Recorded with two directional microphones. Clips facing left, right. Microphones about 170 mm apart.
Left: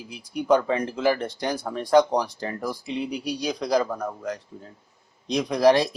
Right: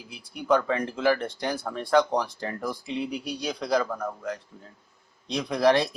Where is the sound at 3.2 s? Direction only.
15° left (ahead or behind).